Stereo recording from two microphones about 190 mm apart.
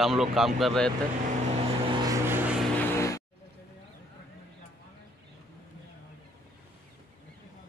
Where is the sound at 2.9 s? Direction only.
15° left (ahead or behind).